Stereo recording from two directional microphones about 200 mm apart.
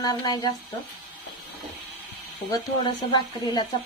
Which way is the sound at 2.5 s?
20° left (ahead or behind).